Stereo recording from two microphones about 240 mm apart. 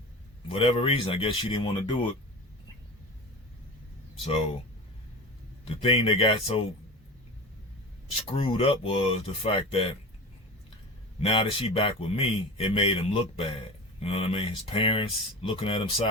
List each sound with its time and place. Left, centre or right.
0.4 s speech: left
4.2 s speech: left
5.7 s speech: left
8.1 s speech: left
11.2 s speech: left